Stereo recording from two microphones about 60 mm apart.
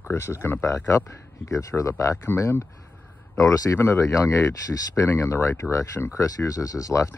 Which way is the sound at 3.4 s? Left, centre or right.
Left.